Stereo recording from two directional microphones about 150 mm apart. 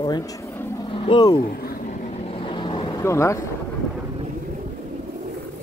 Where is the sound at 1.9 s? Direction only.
50° left (ahead or behind); by 3.0 s 30° left (ahead or behind).